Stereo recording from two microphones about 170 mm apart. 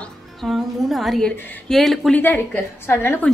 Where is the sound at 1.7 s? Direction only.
Centre (ahead or behind).